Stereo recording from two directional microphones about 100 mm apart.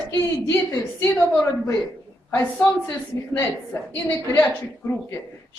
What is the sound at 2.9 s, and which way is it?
A woman's voice, 20° left (ahead or behind).